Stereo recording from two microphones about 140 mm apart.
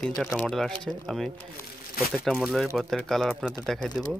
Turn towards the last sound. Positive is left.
turn(degrees=5)  # may be behind; listen again after turning